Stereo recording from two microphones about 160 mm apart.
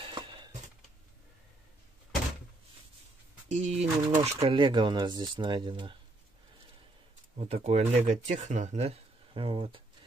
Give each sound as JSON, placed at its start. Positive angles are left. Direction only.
{"t": 3.4, "sound": "speech", "side_deg": -45}
{"t": 7.3, "sound": "speech", "side_deg": -40}